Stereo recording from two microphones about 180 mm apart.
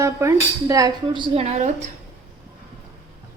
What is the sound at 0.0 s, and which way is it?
A woman's voice, 15° right (ahead or behind).